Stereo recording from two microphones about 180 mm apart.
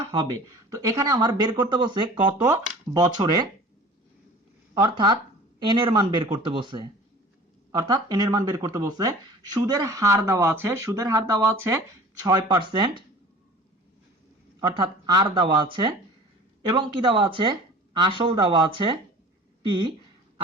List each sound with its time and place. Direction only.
0.7 s speech: 20° right (ahead or behind)
4.7 s speech: 20° right (ahead or behind)
14.6 s speech: 20° right (ahead or behind)